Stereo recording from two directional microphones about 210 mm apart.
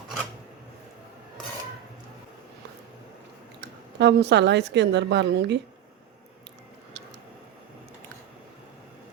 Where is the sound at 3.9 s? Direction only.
55° right (ahead or behind).